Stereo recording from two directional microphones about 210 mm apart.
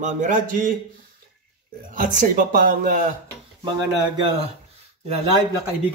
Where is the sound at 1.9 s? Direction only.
40° right (ahead or behind).